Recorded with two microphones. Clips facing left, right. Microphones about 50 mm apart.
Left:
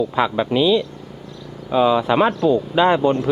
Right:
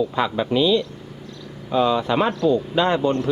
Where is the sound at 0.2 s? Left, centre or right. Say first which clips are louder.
Left 3 dB; centre.